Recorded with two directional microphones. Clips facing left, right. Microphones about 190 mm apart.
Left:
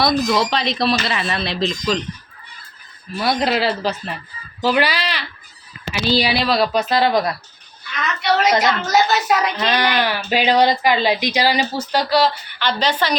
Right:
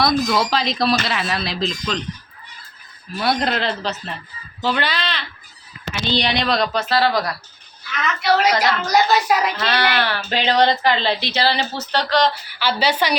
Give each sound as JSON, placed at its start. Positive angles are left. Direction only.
{"t": 0.0, "sound": "speech", "side_deg": 0}
{"t": 3.2, "sound": "a woman's voice", "side_deg": 0}
{"t": 6.7, "sound": "speech", "side_deg": 20}
{"t": 7.9, "sound": "speech", "side_deg": 0}
{"t": 9.6, "sound": "a woman's voice", "side_deg": 15}
{"t": 12.5, "sound": "a woman's voice", "side_deg": -5}